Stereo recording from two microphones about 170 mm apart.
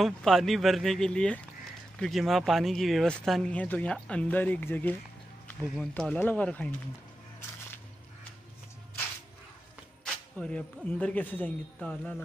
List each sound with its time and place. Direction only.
0.0 s speech: centre (ahead or behind)
7.3 s a sound: 15° left (ahead or behind)
10.0 s speech: 5° left (ahead or behind)